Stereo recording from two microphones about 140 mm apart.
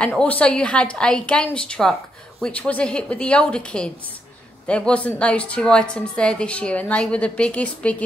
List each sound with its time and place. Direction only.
0.2 s a woman's voice: 10° left (ahead or behind)